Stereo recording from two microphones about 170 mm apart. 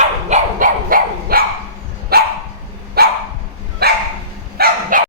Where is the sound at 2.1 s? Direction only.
65° right (ahead or behind).